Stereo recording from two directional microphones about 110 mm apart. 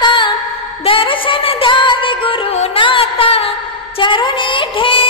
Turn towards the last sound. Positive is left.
turn(degrees=55)  # may be behind; listen again after turning